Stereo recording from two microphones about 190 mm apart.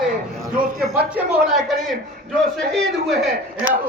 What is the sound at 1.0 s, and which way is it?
Speech, 5° right (ahead or behind).